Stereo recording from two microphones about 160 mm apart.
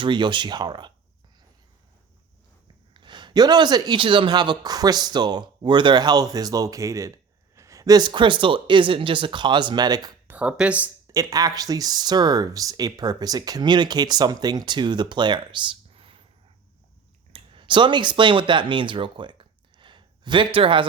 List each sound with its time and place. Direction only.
0.0 s speech: 30° right (ahead or behind)
2.9 s speech: 30° right (ahead or behind)
10.2 s speech: 10° right (ahead or behind)
11.0 s speech: 20° right (ahead or behind)
17.3 s speech: 30° right (ahead or behind)